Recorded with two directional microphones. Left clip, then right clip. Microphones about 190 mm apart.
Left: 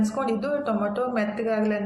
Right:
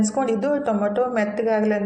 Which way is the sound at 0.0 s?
15° right (ahead or behind).